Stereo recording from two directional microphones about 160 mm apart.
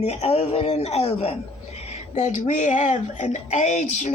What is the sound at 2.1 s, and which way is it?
Speech, 50° left (ahead or behind).